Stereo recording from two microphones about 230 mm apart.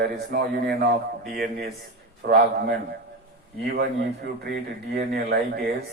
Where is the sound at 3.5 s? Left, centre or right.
Right.